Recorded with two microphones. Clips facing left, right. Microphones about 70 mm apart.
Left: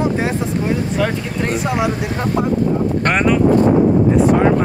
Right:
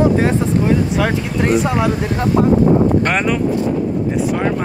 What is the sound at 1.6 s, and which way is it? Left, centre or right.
Speech, centre.